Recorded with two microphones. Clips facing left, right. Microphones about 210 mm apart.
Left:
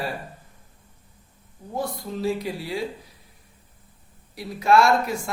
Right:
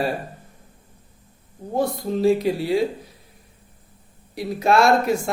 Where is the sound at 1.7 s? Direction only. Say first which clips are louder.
Right 7 dB; 25° right (ahead or behind).